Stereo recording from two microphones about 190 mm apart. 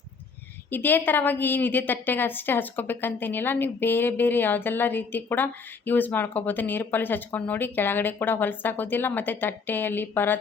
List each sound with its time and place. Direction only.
0.7 s a woman's voice: 10° left (ahead or behind)